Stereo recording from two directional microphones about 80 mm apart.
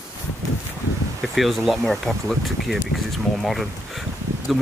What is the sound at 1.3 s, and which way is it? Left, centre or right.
Speech, centre.